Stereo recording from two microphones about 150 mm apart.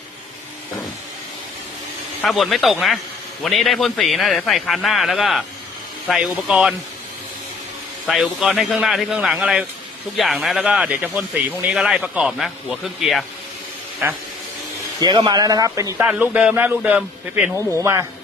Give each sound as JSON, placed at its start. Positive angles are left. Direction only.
{"t": 2.2, "sound": "a man's voice", "side_deg": 0}
{"t": 8.0, "sound": "a man's voice", "side_deg": 0}
{"t": 15.0, "sound": "a man's voice", "side_deg": -25}
{"t": 16.0, "sound": "a man's voice", "side_deg": -10}
{"t": 17.7, "sound": "a man's voice", "side_deg": -20}